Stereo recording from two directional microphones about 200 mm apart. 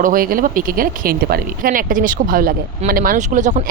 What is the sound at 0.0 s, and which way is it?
Speech, 45° right (ahead or behind).